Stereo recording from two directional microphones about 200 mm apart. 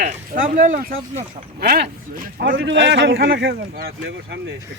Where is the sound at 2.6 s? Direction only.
65° right (ahead or behind).